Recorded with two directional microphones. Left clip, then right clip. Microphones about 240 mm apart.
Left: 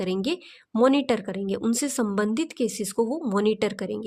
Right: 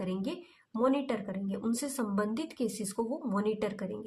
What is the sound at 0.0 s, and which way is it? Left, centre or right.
A woman's voice, left.